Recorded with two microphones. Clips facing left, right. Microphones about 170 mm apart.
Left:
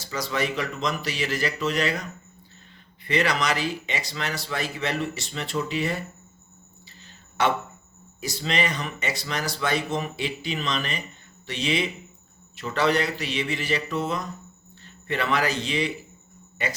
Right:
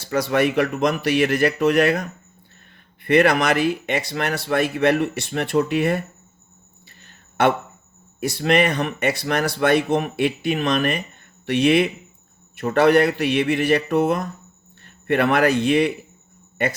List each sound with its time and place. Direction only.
0.0 s speech: 60° right (ahead or behind)
7.0 s a sound: 55° right (ahead or behind)
8.2 s a man's voice: 60° right (ahead or behind)